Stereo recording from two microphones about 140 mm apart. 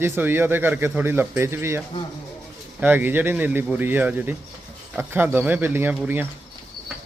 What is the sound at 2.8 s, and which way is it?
A man's voice, 15° right (ahead or behind).